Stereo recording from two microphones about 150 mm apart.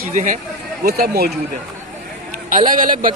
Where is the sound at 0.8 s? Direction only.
90° right.